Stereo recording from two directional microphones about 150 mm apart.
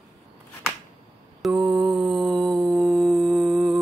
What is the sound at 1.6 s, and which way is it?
Mantra, 30° right (ahead or behind).